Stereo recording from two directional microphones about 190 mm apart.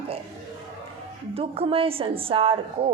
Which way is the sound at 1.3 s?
30° right (ahead or behind).